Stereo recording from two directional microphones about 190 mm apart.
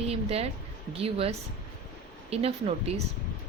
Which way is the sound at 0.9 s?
30° right (ahead or behind).